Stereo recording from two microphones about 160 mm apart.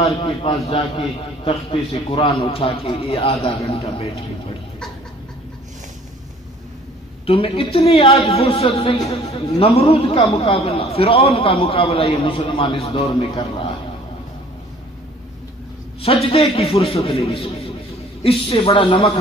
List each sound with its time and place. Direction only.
0.0 s a man's voice: 35° left (ahead or behind)
7.2 s a man's voice: 35° left (ahead or behind)
16.0 s a man's voice: 35° left (ahead or behind)